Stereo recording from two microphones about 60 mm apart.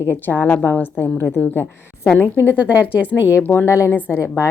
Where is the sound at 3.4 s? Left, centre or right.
Left.